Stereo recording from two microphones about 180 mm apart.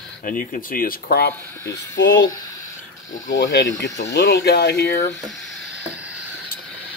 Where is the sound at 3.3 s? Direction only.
80° left.